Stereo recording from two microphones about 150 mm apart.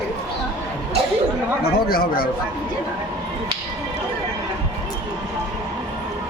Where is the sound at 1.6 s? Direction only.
85° left.